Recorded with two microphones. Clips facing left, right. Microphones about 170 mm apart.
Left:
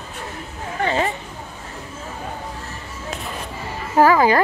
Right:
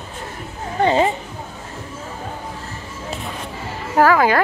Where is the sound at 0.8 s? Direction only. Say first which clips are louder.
Right 5 dB; 30° right (ahead or behind).